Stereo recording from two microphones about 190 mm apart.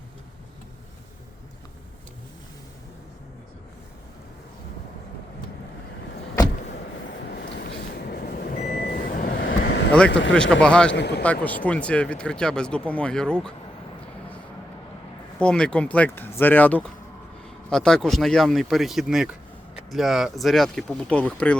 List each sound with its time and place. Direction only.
6.7 s vehicle: 55° left (ahead or behind)
9.4 s vehicle: 65° left (ahead or behind)
10.1 s speech: 75° left (ahead or behind)
10.3 s speech: 5° left (ahead or behind)
10.9 s a man's voice: 65° left (ahead or behind)
11.2 s speech: 10° left (ahead or behind)
15.4 s speech: 5° left (ahead or behind)